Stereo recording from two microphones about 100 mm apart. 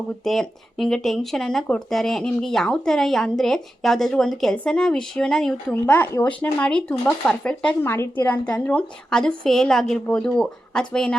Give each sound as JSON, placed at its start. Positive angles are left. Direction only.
{"t": 0.3, "sound": "a woman's voice", "side_deg": 5}
{"t": 5.8, "sound": "a woman's voice", "side_deg": 20}
{"t": 7.9, "sound": "a woman's voice", "side_deg": 25}